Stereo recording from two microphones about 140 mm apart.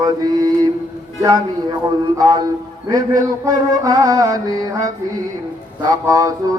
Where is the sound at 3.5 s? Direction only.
25° right (ahead or behind).